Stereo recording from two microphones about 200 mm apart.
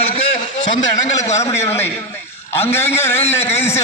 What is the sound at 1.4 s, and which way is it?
A man's voice, 15° left (ahead or behind).